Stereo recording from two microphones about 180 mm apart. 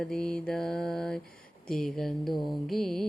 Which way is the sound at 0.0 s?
5° left (ahead or behind).